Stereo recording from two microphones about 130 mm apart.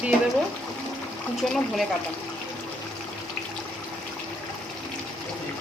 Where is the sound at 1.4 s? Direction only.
Centre (ahead or behind).